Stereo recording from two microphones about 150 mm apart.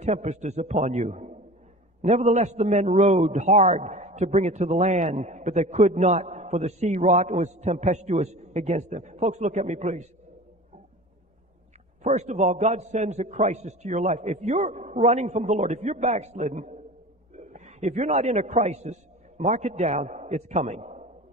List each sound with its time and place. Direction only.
0.0 s a man's voice: 50° right (ahead or behind)
12.0 s a man's voice: 50° right (ahead or behind)